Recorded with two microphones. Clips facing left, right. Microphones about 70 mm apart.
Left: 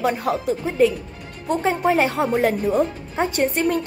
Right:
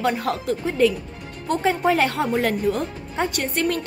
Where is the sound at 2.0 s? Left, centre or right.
Centre.